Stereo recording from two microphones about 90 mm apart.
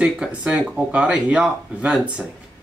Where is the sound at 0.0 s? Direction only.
10° right (ahead or behind).